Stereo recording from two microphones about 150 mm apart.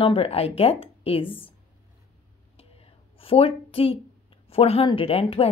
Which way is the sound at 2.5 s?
40° left (ahead or behind).